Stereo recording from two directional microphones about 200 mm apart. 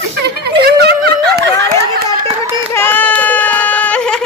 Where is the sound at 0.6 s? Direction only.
55° right (ahead or behind).